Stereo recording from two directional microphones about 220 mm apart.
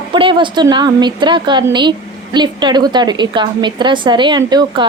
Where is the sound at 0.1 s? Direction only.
20° right (ahead or behind).